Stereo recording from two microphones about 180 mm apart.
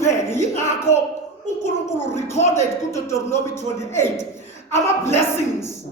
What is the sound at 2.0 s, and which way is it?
A man's voice, 15° left (ahead or behind).